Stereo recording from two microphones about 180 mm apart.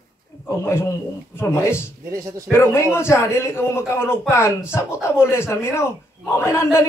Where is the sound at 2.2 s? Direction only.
15° right (ahead or behind).